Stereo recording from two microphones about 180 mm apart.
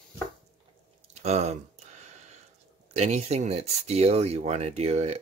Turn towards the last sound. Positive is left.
turn(degrees=-35)  # may be behind; listen again after turning